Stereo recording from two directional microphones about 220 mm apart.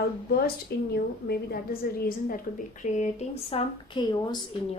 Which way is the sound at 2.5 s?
35° left (ahead or behind).